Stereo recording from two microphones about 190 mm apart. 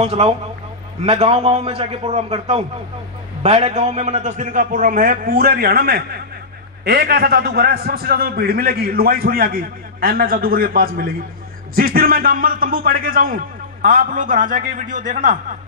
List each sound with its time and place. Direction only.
0.0 s a man's voice: 30° right (ahead or behind)